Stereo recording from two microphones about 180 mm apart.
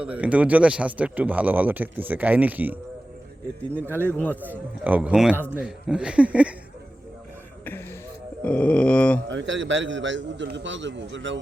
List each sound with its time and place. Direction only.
0.0 s speech: 5° right (ahead or behind)
4.0 s a sound: 10° left (ahead or behind)
4.8 s speech: 10° right (ahead or behind)
7.6 s speech: 10° left (ahead or behind)
8.4 s a sound: 5° left (ahead or behind)
9.3 s a man's voice: 90° right